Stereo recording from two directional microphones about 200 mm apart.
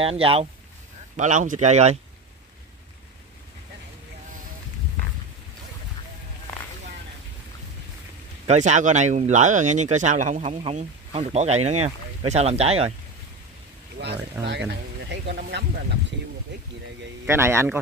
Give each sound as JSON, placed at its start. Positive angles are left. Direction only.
{"t": 0.0, "sound": "speech", "side_deg": -30}
{"t": 8.5, "sound": "speech", "side_deg": -35}
{"t": 13.9, "sound": "speech", "side_deg": -55}
{"t": 17.3, "sound": "a man's voice", "side_deg": -15}